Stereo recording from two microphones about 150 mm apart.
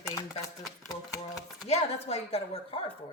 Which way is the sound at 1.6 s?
45° left (ahead or behind).